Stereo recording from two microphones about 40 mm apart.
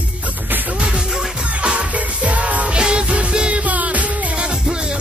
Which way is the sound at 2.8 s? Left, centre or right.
Right.